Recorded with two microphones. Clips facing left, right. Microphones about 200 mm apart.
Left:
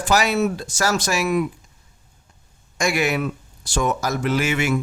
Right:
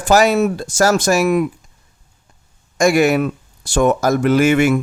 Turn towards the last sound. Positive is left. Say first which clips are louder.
# right 8 dB
turn(degrees=-50)  # may be behind; listen again after turning